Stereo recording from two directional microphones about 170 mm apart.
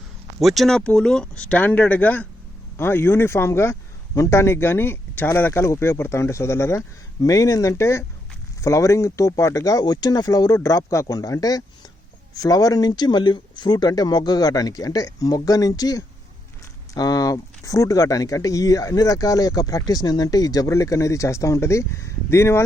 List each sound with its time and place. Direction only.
0.3 s a man's voice: centre (ahead or behind); by 22.6 s 15° left (ahead or behind)